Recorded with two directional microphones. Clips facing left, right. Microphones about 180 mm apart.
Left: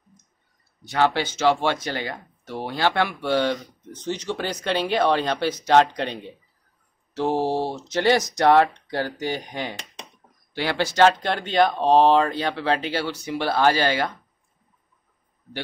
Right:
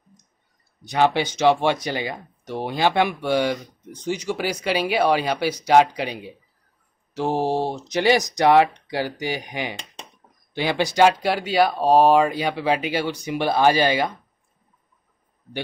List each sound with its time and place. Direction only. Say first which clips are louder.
0.8 s speech: right 2 dB; 15° right (ahead or behind)